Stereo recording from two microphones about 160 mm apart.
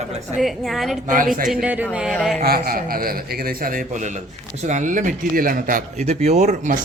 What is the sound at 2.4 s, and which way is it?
A man's voice, 70° right (ahead or behind).